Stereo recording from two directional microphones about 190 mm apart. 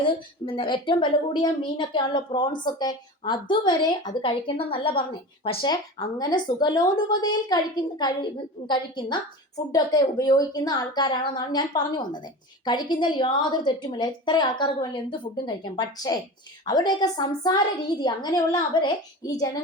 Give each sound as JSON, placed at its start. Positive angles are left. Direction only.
{"t": 0.4, "sound": "a woman's voice", "side_deg": 25}